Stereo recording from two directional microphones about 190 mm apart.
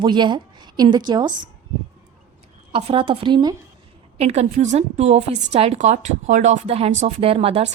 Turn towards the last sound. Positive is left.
turn(degrees=-30)  # may be behind; listen again after turning